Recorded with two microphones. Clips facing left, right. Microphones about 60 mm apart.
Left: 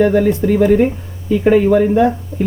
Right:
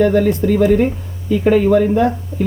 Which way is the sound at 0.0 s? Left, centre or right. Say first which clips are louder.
Left 1 dB; centre.